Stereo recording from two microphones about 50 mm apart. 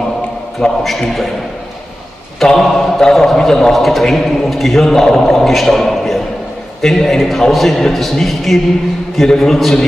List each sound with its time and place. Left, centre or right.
0.6 s a man's voice: centre
2.4 s a man's voice: centre